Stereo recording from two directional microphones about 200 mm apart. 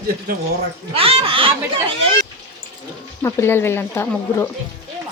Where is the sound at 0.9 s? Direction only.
30° right (ahead or behind).